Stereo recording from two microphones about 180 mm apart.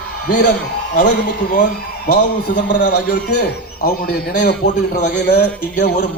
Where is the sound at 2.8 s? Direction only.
65° left (ahead or behind); by 4.7 s 50° left (ahead or behind).